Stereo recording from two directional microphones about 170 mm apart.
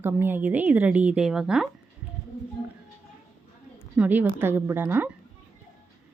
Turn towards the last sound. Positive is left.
turn(degrees=-10)  # may be behind; listen again after turning